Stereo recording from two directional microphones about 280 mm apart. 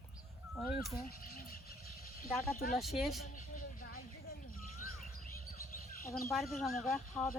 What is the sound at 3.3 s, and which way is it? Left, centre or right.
Vehicle, left.